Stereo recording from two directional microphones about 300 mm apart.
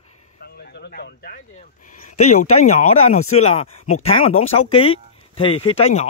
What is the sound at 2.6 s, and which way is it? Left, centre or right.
Speech, left.